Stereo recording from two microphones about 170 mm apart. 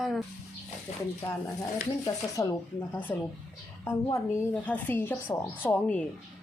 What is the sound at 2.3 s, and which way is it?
A woman's voice, 20° left (ahead or behind).